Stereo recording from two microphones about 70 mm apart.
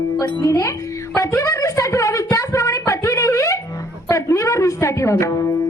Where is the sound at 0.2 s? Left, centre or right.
Left.